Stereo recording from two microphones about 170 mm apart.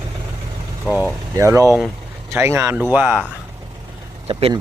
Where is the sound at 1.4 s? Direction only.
15° right (ahead or behind).